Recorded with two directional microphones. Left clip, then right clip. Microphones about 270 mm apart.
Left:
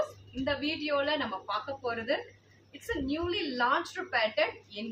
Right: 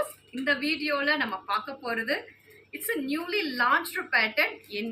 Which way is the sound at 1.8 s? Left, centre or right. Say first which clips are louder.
Right 2 dB; centre.